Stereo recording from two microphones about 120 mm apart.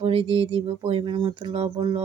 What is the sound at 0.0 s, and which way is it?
Speech, 50° right (ahead or behind).